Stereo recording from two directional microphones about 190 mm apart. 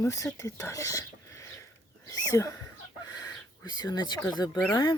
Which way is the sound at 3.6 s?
20° left (ahead or behind).